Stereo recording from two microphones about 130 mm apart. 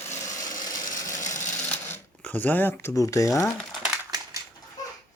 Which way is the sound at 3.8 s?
10° right (ahead or behind).